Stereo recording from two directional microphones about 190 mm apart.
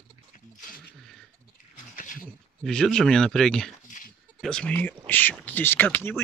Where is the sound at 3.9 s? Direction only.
45° left (ahead or behind).